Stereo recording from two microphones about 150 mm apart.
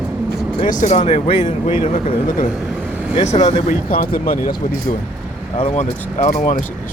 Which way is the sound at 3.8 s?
70° left (ahead or behind).